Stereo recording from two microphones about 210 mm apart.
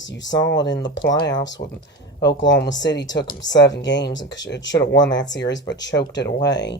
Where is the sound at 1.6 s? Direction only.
40° left (ahead or behind).